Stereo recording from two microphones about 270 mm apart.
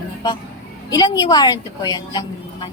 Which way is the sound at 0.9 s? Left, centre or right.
Centre.